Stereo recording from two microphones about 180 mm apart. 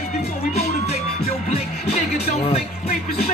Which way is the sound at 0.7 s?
35° left (ahead or behind).